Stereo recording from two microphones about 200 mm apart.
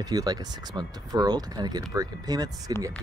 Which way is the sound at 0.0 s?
20° right (ahead or behind).